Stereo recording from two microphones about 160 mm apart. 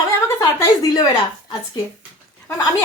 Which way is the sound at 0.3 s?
25° left (ahead or behind).